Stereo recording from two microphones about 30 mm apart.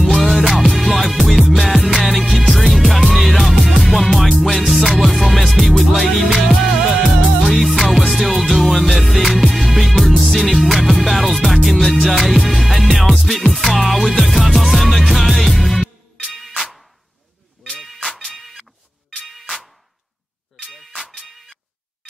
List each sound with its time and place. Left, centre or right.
0.0 s music: centre
1.8 s music: centre
2.0 s music: centre
17.8 s music: centre
18.3 s a sound: centre